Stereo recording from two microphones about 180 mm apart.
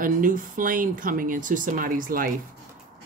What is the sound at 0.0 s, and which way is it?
Speech, 50° right (ahead or behind).